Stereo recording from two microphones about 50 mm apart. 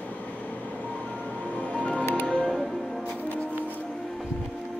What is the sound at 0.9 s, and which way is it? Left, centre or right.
Music, left.